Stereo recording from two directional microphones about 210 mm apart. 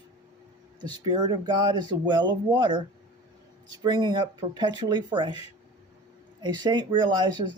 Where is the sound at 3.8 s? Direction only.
20° right (ahead or behind).